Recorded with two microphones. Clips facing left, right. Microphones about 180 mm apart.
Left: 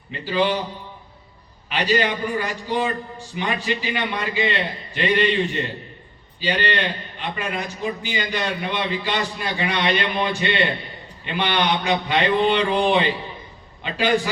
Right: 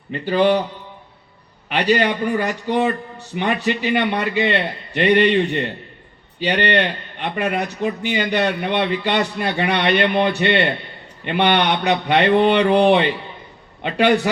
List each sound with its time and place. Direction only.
0.1 s a man's voice: 50° right (ahead or behind)
1.7 s a man's voice: 65° right (ahead or behind)